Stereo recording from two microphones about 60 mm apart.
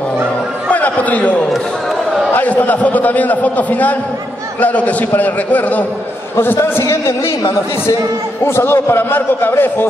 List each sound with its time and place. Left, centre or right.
0.7 s chatter: left
2.3 s a man's voice: left
6.3 s a man's voice: left
6.6 s a man's voice: left
8.5 s a man's voice: left